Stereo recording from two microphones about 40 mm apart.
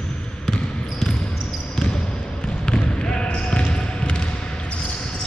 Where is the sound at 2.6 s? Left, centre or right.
Left.